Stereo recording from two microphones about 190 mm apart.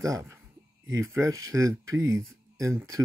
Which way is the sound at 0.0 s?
15° right (ahead or behind).